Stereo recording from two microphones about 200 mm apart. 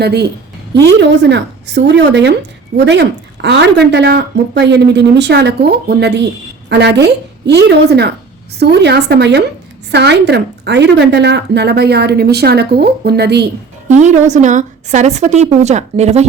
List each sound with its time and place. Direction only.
0.0 s a woman's voice: 55° right (ahead or behind)
13.8 s a woman's voice: 35° right (ahead or behind)